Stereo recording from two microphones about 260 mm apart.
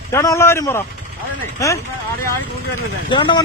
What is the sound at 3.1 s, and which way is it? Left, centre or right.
Speech, centre.